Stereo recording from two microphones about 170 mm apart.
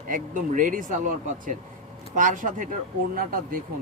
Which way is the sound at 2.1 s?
50° right (ahead or behind).